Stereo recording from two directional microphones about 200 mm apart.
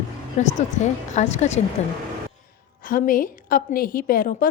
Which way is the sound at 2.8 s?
45° left (ahead or behind).